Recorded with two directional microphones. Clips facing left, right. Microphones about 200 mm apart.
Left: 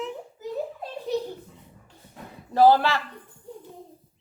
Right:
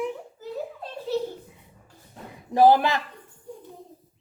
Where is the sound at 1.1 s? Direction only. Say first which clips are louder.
Right 1 dB; 15° left (ahead or behind).